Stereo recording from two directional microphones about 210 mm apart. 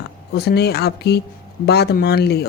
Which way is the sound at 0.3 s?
50° left (ahead or behind).